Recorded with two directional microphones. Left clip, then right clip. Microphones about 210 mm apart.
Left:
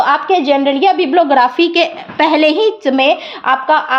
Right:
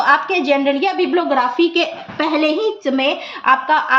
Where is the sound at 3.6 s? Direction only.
30° left (ahead or behind).